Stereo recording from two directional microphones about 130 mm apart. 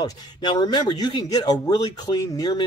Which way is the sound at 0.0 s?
35° left (ahead or behind).